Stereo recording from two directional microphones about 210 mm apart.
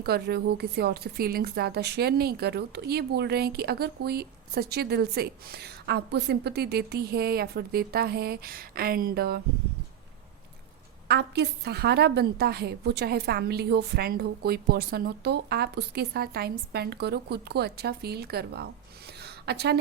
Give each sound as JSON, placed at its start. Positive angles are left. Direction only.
{"t": 0.0, "sound": "a woman's voice", "side_deg": -50}
{"t": 11.1, "sound": "a woman's voice", "side_deg": -50}
{"t": 19.2, "sound": "a sound", "side_deg": -50}